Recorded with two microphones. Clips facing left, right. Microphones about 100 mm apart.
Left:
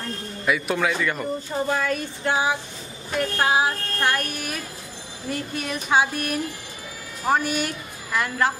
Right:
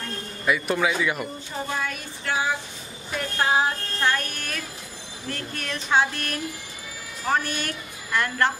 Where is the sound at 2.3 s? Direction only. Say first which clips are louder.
Left 3 dB; 20° left (ahead or behind).